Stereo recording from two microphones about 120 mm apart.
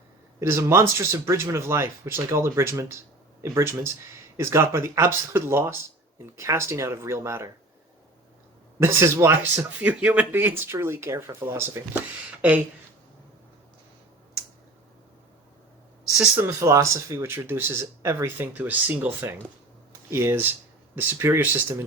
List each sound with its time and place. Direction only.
0.3 s speech: 25° right (ahead or behind)
8.8 s speech: 25° right (ahead or behind)
16.1 s speech: 5° right (ahead or behind)
16.4 s speech: 25° right (ahead or behind)